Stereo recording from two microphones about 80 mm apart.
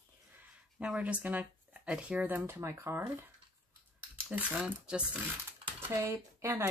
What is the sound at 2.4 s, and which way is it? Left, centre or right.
Speech, right.